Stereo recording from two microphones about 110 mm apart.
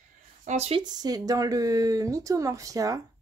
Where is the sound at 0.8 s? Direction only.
40° right (ahead or behind).